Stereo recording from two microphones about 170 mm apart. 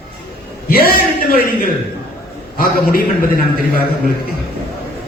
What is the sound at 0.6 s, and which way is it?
A man's voice, 60° left (ahead or behind).